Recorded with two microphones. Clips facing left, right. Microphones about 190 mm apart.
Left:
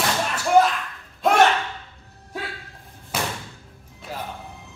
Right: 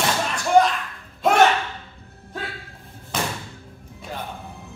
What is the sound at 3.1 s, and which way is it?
Thump, 10° left (ahead or behind).